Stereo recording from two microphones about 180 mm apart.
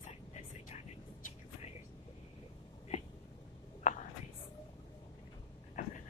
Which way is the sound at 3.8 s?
40° left (ahead or behind).